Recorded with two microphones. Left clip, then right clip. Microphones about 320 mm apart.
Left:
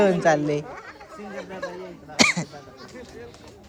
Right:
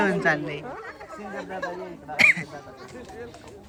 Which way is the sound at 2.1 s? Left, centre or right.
Centre.